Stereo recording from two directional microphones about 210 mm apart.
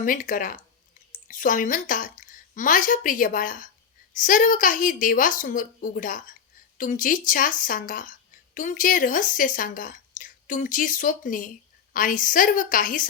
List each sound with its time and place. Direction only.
0.0 s a woman's voice: 40° left (ahead or behind)